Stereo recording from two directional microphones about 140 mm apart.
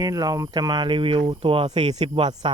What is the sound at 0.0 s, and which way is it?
Speech, 25° right (ahead or behind).